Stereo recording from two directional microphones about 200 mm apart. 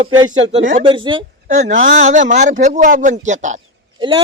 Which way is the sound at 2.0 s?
40° right (ahead or behind).